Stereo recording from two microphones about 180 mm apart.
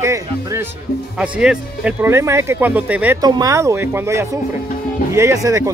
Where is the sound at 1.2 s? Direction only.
5° right (ahead or behind).